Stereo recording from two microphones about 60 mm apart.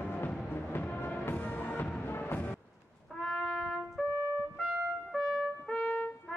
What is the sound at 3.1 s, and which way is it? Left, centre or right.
Brass instrument, centre.